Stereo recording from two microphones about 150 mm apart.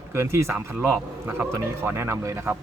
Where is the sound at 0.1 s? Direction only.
20° right (ahead or behind).